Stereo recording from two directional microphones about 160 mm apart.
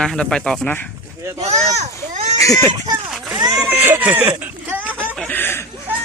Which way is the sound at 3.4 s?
25° right (ahead or behind).